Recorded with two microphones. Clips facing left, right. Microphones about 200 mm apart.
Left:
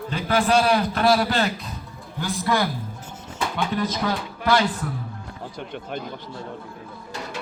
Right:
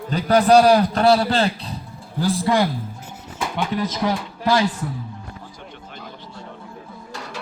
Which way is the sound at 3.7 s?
25° right (ahead or behind).